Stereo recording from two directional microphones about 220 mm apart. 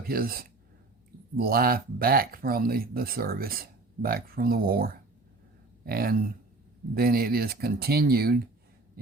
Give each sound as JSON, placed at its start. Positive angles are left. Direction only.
{"t": 0.1, "sound": "speech", "side_deg": -40}